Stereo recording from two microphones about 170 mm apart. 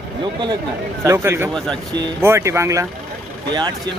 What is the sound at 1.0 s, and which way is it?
Speech, 15° right (ahead or behind).